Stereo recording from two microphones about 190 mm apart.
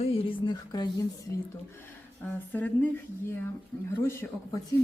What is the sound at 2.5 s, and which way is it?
Speech, 10° left (ahead or behind).